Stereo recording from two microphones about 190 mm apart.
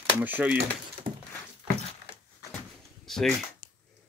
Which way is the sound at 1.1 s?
25° right (ahead or behind).